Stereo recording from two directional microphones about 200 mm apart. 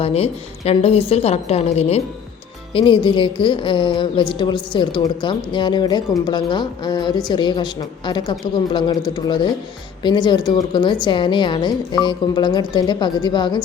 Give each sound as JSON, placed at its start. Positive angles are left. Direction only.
{"t": 0.0, "sound": "a woman's voice", "side_deg": 30}